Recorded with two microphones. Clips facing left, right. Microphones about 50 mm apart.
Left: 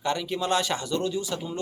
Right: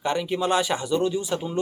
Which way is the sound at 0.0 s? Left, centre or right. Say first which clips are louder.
Right 3 dB; centre.